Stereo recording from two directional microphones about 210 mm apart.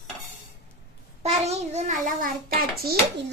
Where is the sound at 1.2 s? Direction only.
30° right (ahead or behind).